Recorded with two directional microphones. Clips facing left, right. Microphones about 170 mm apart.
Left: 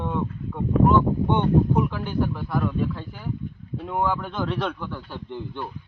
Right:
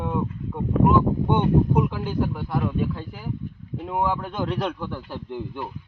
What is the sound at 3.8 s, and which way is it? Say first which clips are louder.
Speech: even; 15° right (ahead or behind).